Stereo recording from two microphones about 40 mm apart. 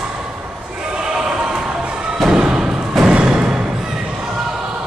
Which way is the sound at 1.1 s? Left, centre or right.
Centre.